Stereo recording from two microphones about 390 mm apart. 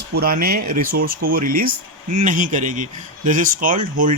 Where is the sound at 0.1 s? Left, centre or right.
Right.